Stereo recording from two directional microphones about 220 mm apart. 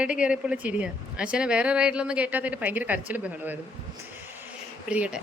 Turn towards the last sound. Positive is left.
turn(degrees=-5)  # may be behind; listen again after turning